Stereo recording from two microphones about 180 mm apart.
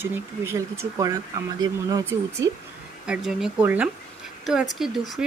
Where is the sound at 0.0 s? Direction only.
10° right (ahead or behind).